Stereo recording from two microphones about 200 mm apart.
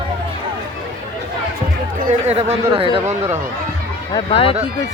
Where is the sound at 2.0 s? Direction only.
35° right (ahead or behind).